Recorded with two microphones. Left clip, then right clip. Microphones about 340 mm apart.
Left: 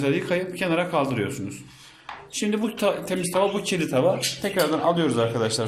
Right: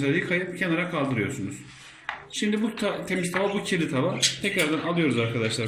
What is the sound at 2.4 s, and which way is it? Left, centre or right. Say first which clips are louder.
Speech: left 4 dB; centre.